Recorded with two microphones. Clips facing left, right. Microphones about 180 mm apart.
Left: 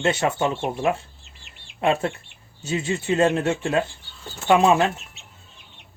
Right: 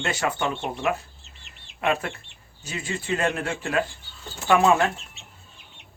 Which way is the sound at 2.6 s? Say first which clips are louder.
Left 7 dB; 25° left (ahead or behind).